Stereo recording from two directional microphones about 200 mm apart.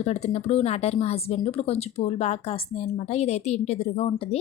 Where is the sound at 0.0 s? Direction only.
35° left (ahead or behind).